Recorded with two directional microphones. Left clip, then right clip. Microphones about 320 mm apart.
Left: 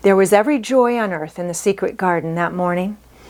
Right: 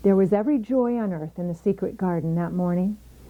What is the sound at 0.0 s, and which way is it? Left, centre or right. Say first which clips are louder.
Speech: left 8 dB; centre.